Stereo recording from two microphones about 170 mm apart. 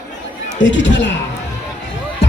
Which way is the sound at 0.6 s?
90° left.